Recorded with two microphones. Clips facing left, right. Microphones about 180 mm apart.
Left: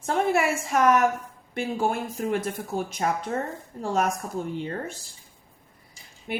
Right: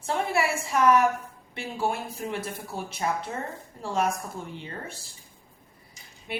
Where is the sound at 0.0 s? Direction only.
50° left (ahead or behind).